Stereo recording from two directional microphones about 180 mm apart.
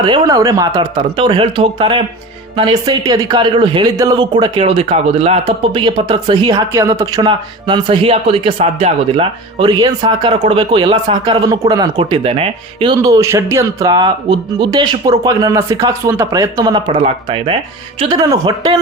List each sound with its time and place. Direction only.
0.0 s a man's voice: 25° right (ahead or behind)